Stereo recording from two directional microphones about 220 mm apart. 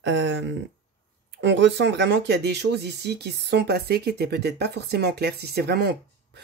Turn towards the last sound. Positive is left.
turn(degrees=-50)  # may be behind; listen again after turning